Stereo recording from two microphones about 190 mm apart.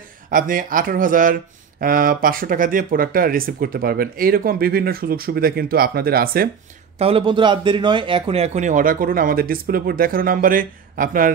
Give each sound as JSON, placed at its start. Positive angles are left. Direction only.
{"t": 0.3, "sound": "speech", "side_deg": -45}
{"t": 7.0, "sound": "speech", "side_deg": -30}